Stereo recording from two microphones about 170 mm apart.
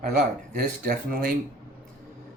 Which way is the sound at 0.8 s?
60° right (ahead or behind).